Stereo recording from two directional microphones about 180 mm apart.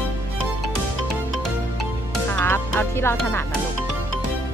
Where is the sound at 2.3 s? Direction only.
10° left (ahead or behind).